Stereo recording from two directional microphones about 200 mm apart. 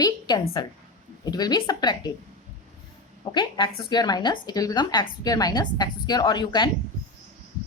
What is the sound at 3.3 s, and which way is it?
A woman's voice, 20° left (ahead or behind).